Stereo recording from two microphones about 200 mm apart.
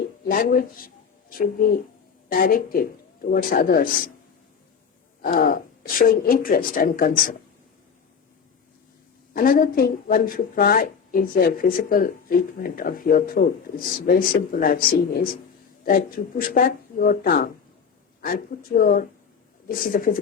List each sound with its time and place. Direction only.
0.3 s speech: 45° left (ahead or behind)
5.2 s speech: 50° left (ahead or behind)
9.3 s speech: 45° left (ahead or behind)